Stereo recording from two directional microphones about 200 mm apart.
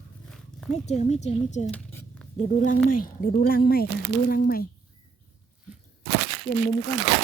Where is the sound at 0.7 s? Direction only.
35° left (ahead or behind).